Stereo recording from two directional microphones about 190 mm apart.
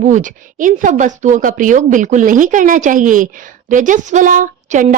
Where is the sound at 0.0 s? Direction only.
40° right (ahead or behind).